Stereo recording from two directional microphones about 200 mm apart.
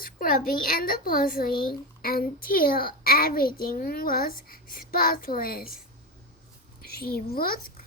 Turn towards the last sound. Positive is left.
turn(degrees=45)  # may be behind; listen again after turning